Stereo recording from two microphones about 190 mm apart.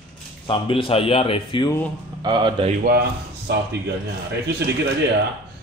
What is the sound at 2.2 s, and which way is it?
Speech, 25° right (ahead or behind).